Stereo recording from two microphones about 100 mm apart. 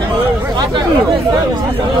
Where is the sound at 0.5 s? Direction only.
45° right (ahead or behind).